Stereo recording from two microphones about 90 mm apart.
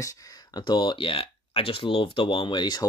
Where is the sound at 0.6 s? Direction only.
60° left (ahead or behind).